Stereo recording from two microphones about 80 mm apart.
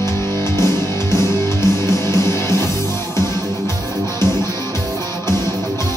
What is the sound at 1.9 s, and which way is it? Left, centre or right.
Music, left.